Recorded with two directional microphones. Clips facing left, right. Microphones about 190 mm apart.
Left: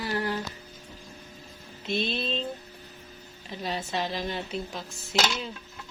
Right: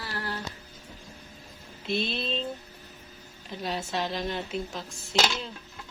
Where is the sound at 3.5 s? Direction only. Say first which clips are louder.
Even; centre (ahead or behind).